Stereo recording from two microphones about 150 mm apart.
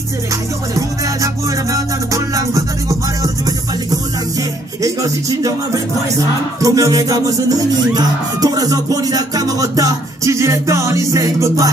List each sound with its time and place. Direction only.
0.7 s music: 20° right (ahead or behind)
4.8 s music: 20° right (ahead or behind)
6.6 s music: 25° right (ahead or behind)